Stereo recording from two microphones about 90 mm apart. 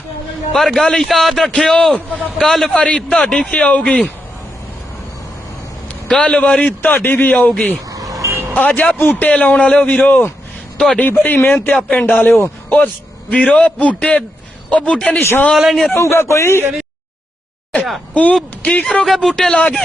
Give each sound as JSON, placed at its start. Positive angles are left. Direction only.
{"t": 0.5, "sound": "a man's voice", "side_deg": 5}
{"t": 6.1, "sound": "a man's voice", "side_deg": 10}
{"t": 7.9, "sound": "vehicle", "side_deg": -40}
{"t": 8.5, "sound": "a man's voice", "side_deg": 15}
{"t": 10.8, "sound": "a man's voice", "side_deg": 5}
{"t": 11.4, "sound": "speech", "side_deg": 25}
{"t": 11.7, "sound": "a man's voice", "side_deg": 5}
{"t": 12.2, "sound": "a man's voice", "side_deg": 20}
{"t": 15.2, "sound": "speech", "side_deg": 30}
{"t": 15.5, "sound": "a man's voice", "side_deg": 0}
{"t": 16.0, "sound": "speech", "side_deg": 30}
{"t": 18.1, "sound": "a man's voice", "side_deg": 15}
{"t": 19.0, "sound": "a man's voice", "side_deg": 0}